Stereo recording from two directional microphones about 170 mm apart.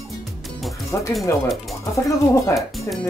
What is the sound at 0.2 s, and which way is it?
Music, centre (ahead or behind).